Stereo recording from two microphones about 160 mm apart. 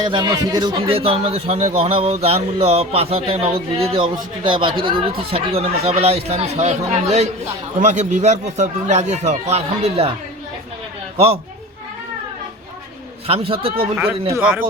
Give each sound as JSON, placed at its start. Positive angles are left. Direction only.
{"t": 0.0, "sound": "speech", "side_deg": -25}
{"t": 13.2, "sound": "speech", "side_deg": -35}
{"t": 13.9, "sound": "speech", "side_deg": -15}